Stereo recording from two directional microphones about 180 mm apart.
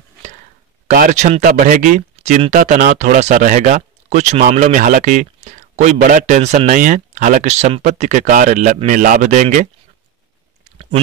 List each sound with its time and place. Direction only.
0.8 s speech: 40° right (ahead or behind)